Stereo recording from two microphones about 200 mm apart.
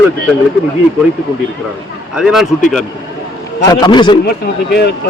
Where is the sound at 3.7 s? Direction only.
20° left (ahead or behind).